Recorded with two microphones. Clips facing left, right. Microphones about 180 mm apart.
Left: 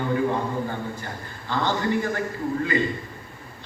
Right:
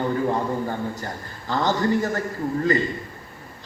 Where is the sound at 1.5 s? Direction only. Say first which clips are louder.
Right 3 dB; 40° right (ahead or behind).